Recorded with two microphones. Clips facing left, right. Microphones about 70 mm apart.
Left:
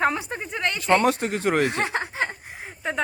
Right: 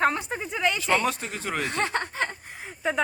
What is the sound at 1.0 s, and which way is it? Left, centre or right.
Speech, left.